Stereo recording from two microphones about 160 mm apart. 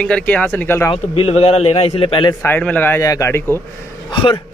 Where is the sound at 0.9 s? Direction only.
35° left (ahead or behind).